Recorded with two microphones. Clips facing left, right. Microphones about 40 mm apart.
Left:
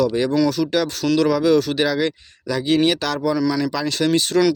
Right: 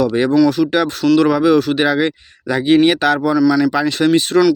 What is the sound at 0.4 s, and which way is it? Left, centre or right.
Speech, right.